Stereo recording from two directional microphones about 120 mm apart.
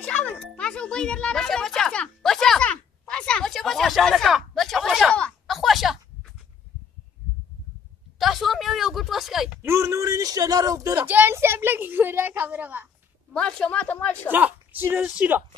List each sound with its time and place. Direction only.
0.0 s music: 10° left (ahead or behind)
8.2 s a sound: centre (ahead or behind)
9.6 s speech: 20° right (ahead or behind)
11.0 s a woman's voice: 15° right (ahead or behind)
13.3 s a woman's voice: 5° left (ahead or behind)
14.3 s a woman's voice: 15° right (ahead or behind)